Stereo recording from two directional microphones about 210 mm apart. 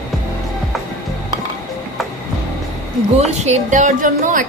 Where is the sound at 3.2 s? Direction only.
30° right (ahead or behind).